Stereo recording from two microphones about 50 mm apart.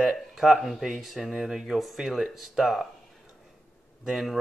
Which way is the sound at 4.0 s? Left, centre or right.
Centre.